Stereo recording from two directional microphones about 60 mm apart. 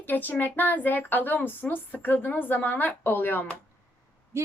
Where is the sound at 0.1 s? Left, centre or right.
Left.